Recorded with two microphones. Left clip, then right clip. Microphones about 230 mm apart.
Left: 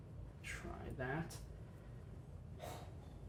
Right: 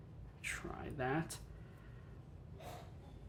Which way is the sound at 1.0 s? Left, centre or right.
Right.